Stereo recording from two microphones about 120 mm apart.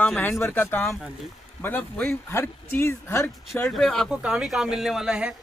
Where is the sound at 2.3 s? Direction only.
20° left (ahead or behind).